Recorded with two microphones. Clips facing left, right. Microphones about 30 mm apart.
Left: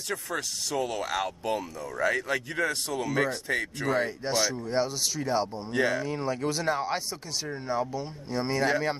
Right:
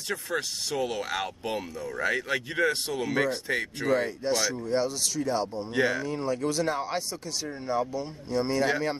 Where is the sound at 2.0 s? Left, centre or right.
Right.